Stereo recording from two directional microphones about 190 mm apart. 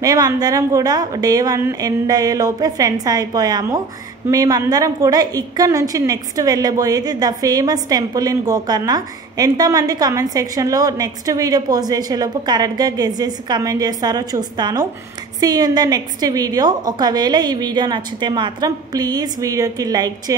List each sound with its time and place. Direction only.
0.0 s a woman's voice: 20° right (ahead or behind)